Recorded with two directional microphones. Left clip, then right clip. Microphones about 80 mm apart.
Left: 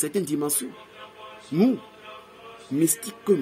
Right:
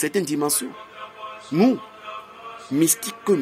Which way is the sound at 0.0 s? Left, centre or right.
Left.